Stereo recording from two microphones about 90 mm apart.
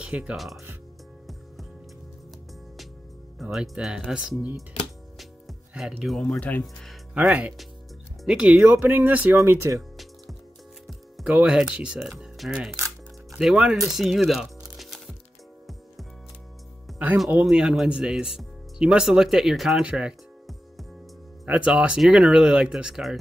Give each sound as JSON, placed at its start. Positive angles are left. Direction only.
{"t": 0.0, "sound": "speech", "side_deg": -10}
{"t": 0.4, "sound": "speech", "side_deg": 0}
{"t": 3.7, "sound": "speech", "side_deg": -10}
{"t": 5.2, "sound": "music", "side_deg": -5}
{"t": 6.1, "sound": "speech", "side_deg": 5}
{"t": 7.2, "sound": "speech", "side_deg": -15}
{"t": 9.4, "sound": "speech", "side_deg": -35}
{"t": 11.2, "sound": "speech", "side_deg": -15}
{"t": 17.5, "sound": "speech", "side_deg": -5}
{"t": 21.5, "sound": "speech", "side_deg": -10}